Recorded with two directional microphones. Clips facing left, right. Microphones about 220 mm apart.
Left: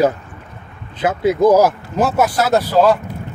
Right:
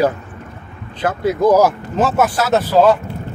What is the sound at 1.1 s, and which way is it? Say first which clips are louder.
Speech: left 3 dB; 20° left (ahead or behind).